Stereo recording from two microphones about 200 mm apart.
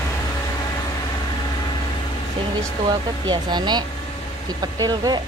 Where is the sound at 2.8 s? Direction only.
20° right (ahead or behind).